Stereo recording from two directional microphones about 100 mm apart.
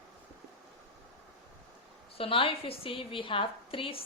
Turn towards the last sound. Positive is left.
turn(degrees=65)  # may be behind; listen again after turning